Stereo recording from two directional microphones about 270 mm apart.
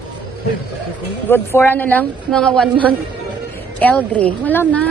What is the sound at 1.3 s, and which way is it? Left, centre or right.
Speech, centre.